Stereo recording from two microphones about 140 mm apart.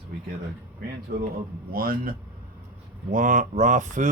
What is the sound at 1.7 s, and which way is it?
Speech, 90° right.